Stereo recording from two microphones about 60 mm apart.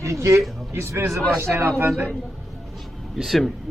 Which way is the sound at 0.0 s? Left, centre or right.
Right.